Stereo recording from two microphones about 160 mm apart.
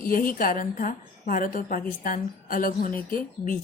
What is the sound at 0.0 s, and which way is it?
Speech, 60° left (ahead or behind).